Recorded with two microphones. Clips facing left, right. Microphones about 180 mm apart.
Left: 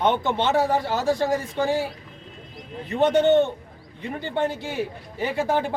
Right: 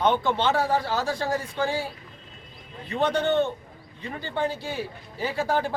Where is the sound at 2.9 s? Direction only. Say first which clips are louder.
Left 5 dB; 20° left (ahead or behind).